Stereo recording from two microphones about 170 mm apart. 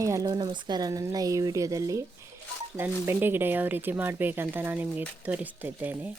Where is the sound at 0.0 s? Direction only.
20° right (ahead or behind).